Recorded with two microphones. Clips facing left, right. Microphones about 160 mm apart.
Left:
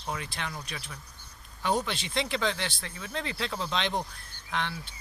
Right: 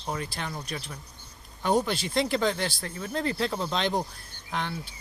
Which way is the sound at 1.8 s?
40° right (ahead or behind).